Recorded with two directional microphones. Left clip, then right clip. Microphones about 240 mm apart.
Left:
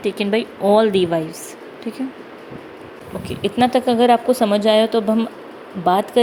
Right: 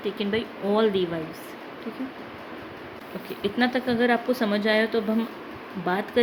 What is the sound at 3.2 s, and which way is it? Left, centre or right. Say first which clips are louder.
Speech: left 8 dB; left.